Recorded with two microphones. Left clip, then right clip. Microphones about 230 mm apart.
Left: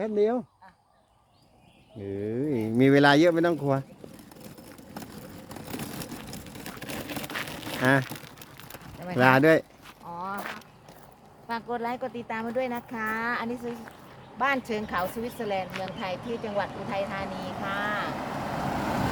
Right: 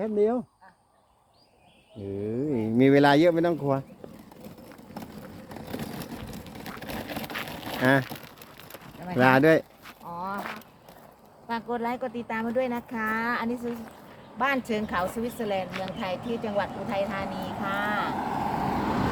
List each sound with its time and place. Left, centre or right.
0.0 s speech: centre
2.2 s speech: centre
4.9 s wood: left
7.4 s a sound: left
7.8 s speech: centre
8.0 s crumpling: left
9.1 s speech: centre
10.1 s walk: centre
11.4 s speech: centre
16.1 s speech: left
17.6 s speech: centre
18.1 s vehicle: left